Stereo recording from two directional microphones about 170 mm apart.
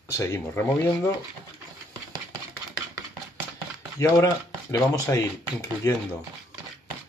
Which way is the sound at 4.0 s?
20° left (ahead or behind).